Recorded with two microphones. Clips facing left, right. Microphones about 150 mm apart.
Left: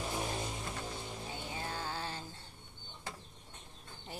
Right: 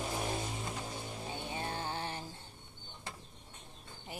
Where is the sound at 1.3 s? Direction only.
20° right (ahead or behind).